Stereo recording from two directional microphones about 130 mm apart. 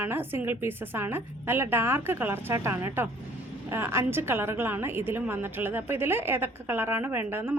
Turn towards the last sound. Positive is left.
turn(degrees=-15)  # may be behind; listen again after turning